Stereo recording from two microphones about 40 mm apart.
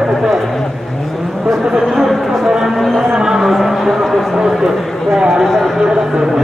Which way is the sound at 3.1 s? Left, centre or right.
Centre.